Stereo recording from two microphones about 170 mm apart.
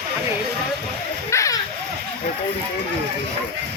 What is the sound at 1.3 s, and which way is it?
Splash, 20° left (ahead or behind).